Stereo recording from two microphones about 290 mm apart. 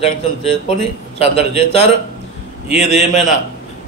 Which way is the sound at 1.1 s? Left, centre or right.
Left.